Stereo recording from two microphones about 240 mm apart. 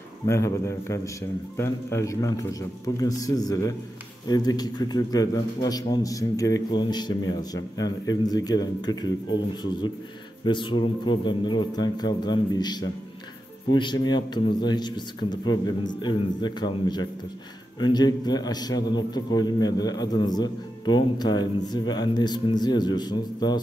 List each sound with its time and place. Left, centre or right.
0.3 s a man's voice: centre
10.4 s a man's voice: centre